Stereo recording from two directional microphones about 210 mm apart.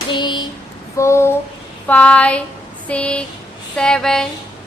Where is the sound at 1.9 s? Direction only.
5° left (ahead or behind).